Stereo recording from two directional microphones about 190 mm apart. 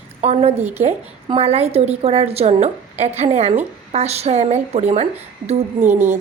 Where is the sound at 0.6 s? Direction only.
10° right (ahead or behind).